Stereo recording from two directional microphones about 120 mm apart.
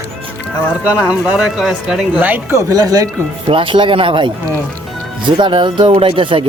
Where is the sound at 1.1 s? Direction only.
10° right (ahead or behind); by 3.1 s 30° right (ahead or behind).